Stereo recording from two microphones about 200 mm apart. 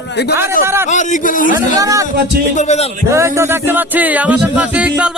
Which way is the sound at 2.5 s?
35° left (ahead or behind).